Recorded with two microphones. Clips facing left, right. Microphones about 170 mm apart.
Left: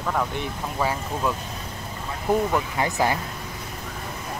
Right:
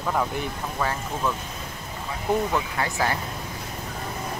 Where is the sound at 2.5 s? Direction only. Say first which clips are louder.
Left 2 dB; 15° left (ahead or behind).